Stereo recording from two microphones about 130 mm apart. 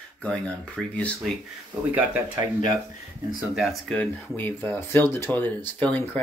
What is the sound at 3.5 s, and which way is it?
Speech, centre (ahead or behind).